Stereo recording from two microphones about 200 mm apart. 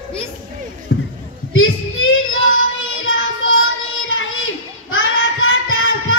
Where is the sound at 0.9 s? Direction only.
70° left (ahead or behind).